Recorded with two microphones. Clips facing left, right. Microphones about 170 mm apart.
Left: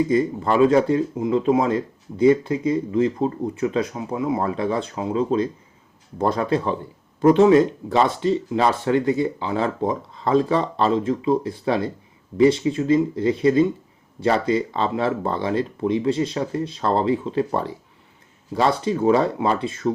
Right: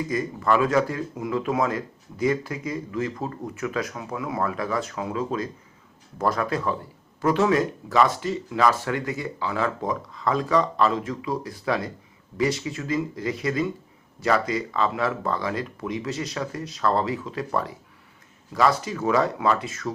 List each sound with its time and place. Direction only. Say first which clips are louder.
0.1 s speech: left 4 dB; 30° left (ahead or behind)